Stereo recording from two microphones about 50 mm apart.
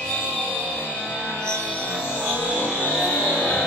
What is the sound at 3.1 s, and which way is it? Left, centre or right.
Music, left.